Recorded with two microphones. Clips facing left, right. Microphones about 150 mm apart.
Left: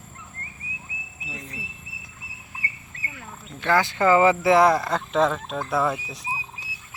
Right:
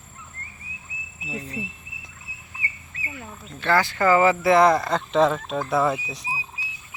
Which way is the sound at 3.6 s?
20° left (ahead or behind).